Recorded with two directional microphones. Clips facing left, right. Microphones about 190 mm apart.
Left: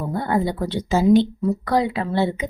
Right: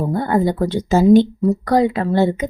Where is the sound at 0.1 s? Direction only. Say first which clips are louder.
Right 2 dB; 45° right (ahead or behind).